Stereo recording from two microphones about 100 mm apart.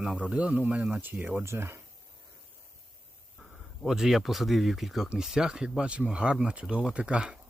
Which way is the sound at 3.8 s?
5° right (ahead or behind).